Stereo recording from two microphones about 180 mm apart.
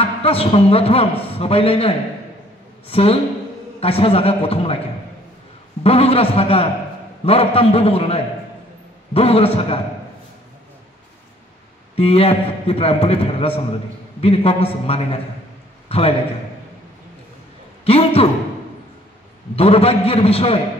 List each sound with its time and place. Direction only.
0.0 s a man's voice: 35° left (ahead or behind)
5.9 s a man's voice: 35° left (ahead or behind)
11.9 s a man's voice: 35° left (ahead or behind)
17.8 s a man's voice: 35° left (ahead or behind)
19.5 s a man's voice: 35° left (ahead or behind)